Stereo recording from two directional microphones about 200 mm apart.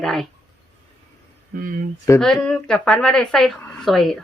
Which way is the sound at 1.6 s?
45° right (ahead or behind).